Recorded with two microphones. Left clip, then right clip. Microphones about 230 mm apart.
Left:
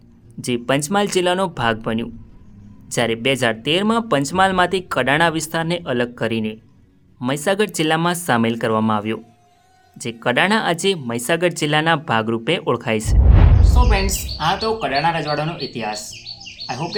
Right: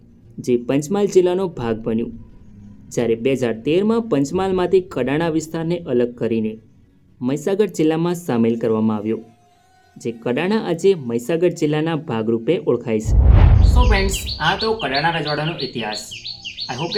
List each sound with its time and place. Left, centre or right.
0.4 s speech: left
13.3 s speech: centre